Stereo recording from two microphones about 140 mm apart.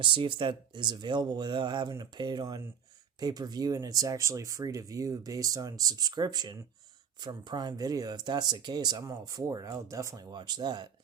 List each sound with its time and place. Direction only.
0.0 s speech: 35° right (ahead or behind)